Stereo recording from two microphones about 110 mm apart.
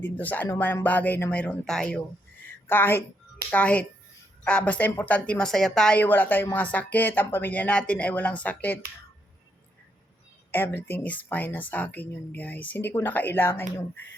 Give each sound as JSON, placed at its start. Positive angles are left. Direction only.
{"t": 0.0, "sound": "speech", "side_deg": 15}
{"t": 2.5, "sound": "a sound", "side_deg": 20}
{"t": 3.5, "sound": "speech", "side_deg": 10}
{"t": 10.5, "sound": "speech", "side_deg": 20}